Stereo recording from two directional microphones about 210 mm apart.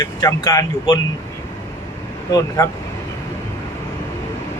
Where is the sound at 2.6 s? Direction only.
15° left (ahead or behind).